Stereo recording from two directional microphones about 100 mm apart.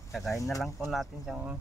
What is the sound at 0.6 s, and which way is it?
Speech, centre (ahead or behind).